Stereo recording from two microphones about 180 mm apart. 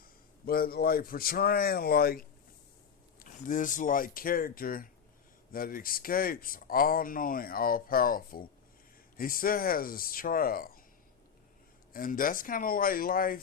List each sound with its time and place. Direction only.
0.0 s a man's voice: 55° left (ahead or behind)
3.2 s speech: 45° left (ahead or behind)
11.9 s speech: 50° left (ahead or behind)